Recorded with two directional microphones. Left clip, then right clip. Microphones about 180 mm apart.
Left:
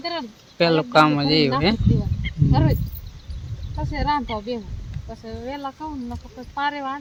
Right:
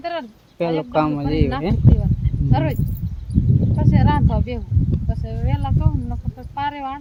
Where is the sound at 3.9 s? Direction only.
Centre (ahead or behind).